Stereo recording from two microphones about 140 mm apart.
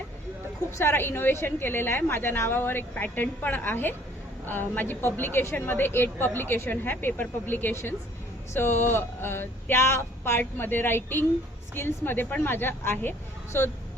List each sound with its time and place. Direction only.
0.8 s a woman's voice: 15° left (ahead or behind)